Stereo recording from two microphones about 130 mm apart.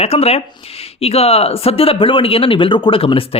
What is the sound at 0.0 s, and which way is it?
Speech, 50° left (ahead or behind).